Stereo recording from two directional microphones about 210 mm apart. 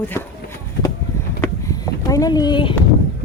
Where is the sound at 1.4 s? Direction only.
15° left (ahead or behind).